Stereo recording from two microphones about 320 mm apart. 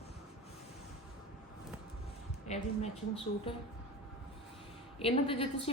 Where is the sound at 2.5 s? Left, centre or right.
Left.